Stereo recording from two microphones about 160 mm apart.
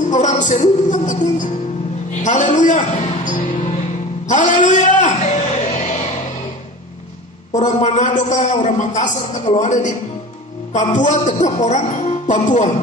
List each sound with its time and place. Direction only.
0.0 s music: 50° left (ahead or behind)
7.5 s a man's voice: 50° left (ahead or behind)